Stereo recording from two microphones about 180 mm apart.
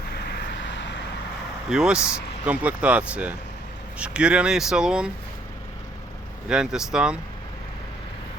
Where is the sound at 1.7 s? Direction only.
5° right (ahead or behind).